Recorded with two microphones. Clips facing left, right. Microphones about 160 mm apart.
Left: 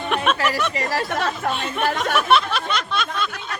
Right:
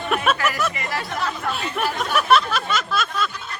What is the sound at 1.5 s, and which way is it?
Speech, 5° right (ahead or behind).